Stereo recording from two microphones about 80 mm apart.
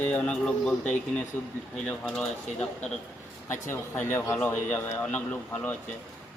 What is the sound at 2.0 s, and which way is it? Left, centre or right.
Speech, centre.